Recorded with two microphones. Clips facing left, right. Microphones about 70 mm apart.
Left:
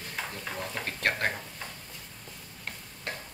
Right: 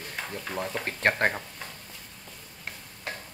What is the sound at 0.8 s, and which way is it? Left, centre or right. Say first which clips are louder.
Speech: right 5 dB; right.